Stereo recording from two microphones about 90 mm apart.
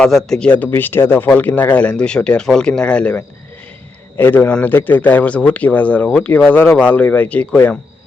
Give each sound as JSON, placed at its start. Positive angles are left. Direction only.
{"t": 0.0, "sound": "speech", "side_deg": 5}